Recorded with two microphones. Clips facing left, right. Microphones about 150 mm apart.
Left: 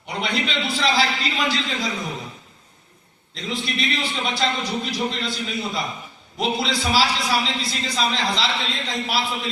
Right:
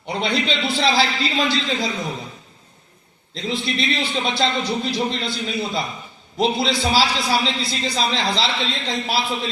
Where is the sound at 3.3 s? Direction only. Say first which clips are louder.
Right 3 dB; 30° right (ahead or behind).